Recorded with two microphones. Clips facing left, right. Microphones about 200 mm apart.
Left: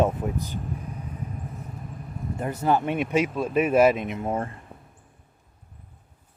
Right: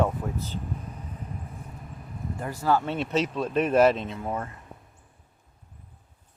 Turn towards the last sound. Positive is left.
turn(degrees=30)  # may be behind; listen again after turning